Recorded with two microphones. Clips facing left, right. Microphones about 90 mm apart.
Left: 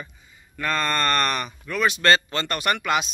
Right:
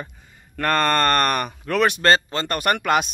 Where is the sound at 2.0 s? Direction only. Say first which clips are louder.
Right 2 dB; 35° right (ahead or behind).